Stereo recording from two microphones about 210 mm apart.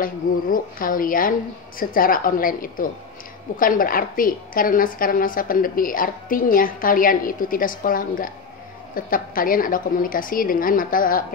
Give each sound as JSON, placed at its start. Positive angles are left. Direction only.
{"t": 0.0, "sound": "a woman's voice", "side_deg": 40}